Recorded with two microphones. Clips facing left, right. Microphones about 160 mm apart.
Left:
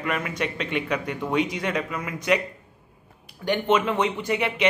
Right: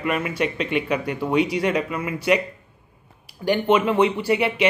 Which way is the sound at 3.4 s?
10° right (ahead or behind).